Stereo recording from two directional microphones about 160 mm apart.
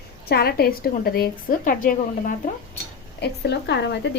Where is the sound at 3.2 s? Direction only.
90° left.